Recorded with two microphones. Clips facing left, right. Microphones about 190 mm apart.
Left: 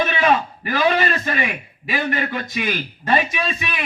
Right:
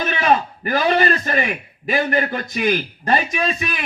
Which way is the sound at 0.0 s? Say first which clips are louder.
Even; 40° right (ahead or behind).